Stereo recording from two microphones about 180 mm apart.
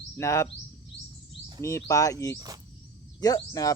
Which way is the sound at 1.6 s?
15° left (ahead or behind).